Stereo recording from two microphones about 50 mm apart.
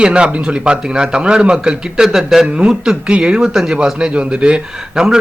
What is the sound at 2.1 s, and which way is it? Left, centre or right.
Speech, centre.